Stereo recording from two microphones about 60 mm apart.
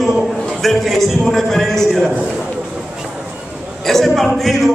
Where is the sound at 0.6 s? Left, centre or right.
Centre.